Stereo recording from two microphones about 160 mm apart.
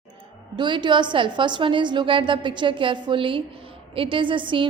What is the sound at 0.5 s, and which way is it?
A woman's voice, 30° right (ahead or behind).